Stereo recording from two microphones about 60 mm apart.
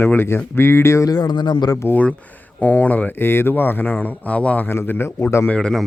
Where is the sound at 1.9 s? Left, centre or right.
Left.